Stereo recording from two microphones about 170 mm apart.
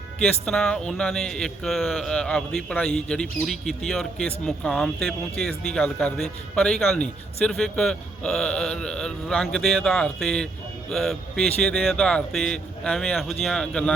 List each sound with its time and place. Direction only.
0.2 s a man's voice: 5° left (ahead or behind)